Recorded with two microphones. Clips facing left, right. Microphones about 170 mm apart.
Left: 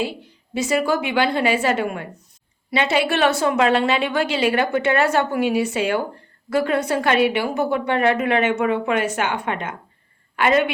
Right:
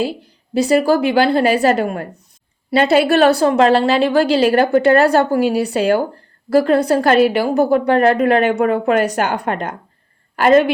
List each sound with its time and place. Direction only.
0.5 s a woman's voice: 35° right (ahead or behind)